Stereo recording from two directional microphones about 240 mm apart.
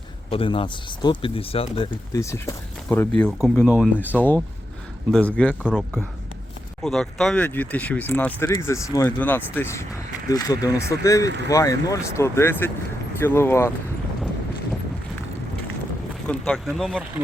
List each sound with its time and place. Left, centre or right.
0.3 s speech: left
16.5 s speech: centre